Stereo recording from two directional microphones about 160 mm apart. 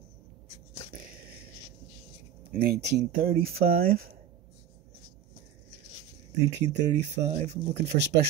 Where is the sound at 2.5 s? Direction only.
80° right.